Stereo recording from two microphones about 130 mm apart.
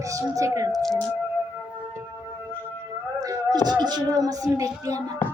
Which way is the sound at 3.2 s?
30° right (ahead or behind).